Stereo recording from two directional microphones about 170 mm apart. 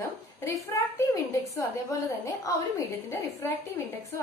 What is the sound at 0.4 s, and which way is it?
A woman's voice, 15° left (ahead or behind).